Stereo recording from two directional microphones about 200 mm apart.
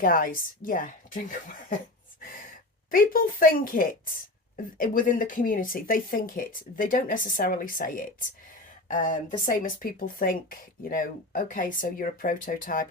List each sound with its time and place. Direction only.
0.0 s speech: 45° left (ahead or behind)